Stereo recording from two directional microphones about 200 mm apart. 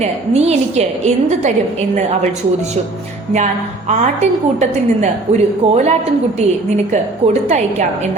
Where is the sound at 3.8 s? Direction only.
35° right (ahead or behind).